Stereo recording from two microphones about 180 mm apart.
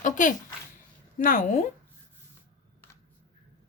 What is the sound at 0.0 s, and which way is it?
A woman's voice, 45° left (ahead or behind).